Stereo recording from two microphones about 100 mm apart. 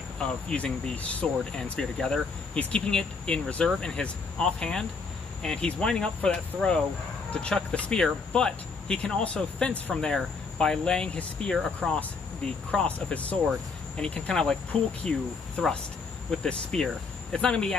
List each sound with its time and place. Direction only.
0.2 s speech: 10° left (ahead or behind)
12.7 s speech: 15° left (ahead or behind)